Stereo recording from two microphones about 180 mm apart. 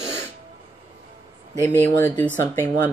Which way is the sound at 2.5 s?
15° left (ahead or behind).